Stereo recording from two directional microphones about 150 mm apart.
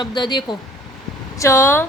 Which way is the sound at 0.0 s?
30° left (ahead or behind).